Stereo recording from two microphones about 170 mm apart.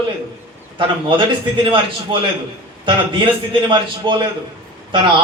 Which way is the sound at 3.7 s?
30° right (ahead or behind).